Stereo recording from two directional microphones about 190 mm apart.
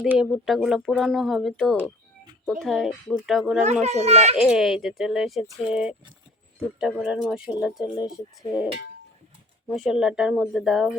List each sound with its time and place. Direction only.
0.0 s speech: 5° right (ahead or behind)
3.6 s a child's voice: 35° right (ahead or behind)
4.4 s speech: 5° right (ahead or behind)
9.6 s speech: centre (ahead or behind)